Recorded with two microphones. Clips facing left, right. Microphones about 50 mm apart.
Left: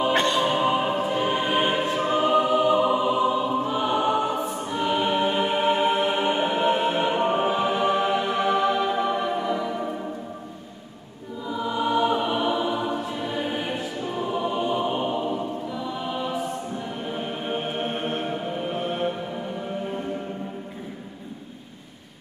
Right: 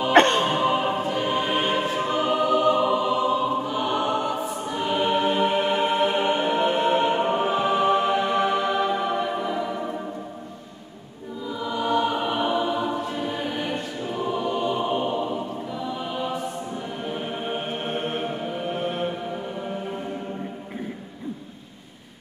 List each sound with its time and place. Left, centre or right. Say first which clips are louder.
0.1 s music: right 4 dB; right
0.6 s music: even; centre
1.0 s choir: even; centre
7.2 s music: even; centre
11.4 s music: left 1 dB; centre
12.2 s choir: even; centre
14.8 s chant: right 1 dB; centre
17.0 s music: right 2 dB; centre